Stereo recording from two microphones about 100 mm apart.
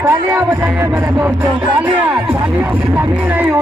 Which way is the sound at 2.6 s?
20° right (ahead or behind).